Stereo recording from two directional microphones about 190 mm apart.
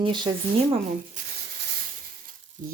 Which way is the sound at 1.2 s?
45° right (ahead or behind).